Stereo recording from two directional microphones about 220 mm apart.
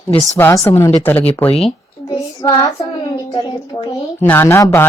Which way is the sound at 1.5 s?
25° left (ahead or behind).